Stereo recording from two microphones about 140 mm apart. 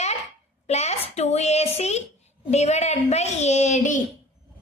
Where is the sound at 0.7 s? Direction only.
50° left (ahead or behind).